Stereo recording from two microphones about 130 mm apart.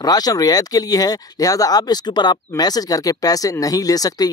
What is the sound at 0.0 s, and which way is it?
Speech, 30° left (ahead or behind).